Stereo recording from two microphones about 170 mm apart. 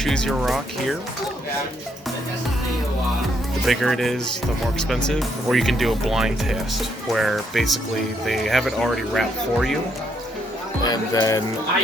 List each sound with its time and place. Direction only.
0.0 s speech: 5° left (ahead or behind)
3.7 s speech: centre (ahead or behind)
10.8 s speech: 20° left (ahead or behind)